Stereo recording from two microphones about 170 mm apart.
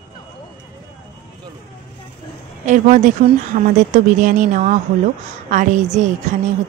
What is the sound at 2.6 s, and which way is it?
A woman's voice, 45° right (ahead or behind).